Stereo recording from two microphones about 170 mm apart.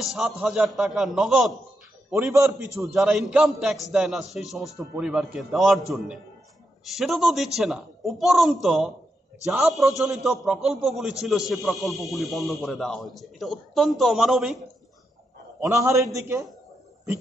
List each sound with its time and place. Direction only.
0.0 s a man's voice: 5° right (ahead or behind)
2.3 s a man's voice: 15° right (ahead or behind)
2.9 s a man's voice: centre (ahead or behind)
6.8 s a man's voice: centre (ahead or behind)
15.6 s a man's voice: 15° right (ahead or behind)